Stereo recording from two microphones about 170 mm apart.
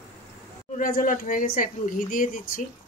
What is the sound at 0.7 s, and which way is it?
Speech, 55° left (ahead or behind).